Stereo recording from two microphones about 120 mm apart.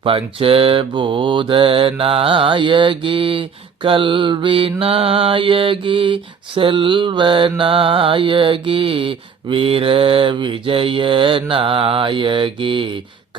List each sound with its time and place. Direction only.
0.0 s mantra: 50° right (ahead or behind)